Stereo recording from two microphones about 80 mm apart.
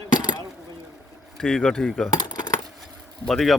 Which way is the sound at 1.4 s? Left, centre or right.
Centre.